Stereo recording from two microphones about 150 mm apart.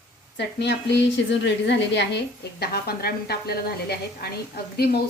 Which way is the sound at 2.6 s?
90° left.